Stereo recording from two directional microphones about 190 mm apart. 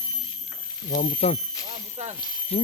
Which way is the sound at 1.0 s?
35° left (ahead or behind).